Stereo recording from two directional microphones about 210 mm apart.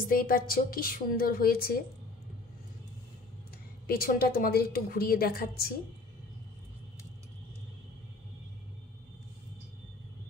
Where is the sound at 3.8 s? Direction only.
45° left (ahead or behind).